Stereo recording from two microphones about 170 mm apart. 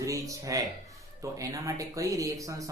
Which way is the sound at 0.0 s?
20° right (ahead or behind).